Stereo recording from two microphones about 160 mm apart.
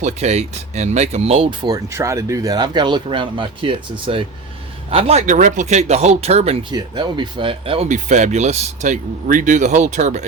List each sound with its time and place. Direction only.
0.0 s speech: 45° right (ahead or behind)
1.6 s a man's voice: 20° right (ahead or behind); by 5.2 s 40° right (ahead or behind)
5.2 s speech: 50° right (ahead or behind)
6.7 s speech: 30° right (ahead or behind); by 10.2 s 50° right (ahead or behind)